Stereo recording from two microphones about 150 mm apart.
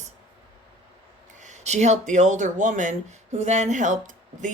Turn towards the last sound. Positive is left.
turn(degrees=-55)  # may be behind; listen again after turning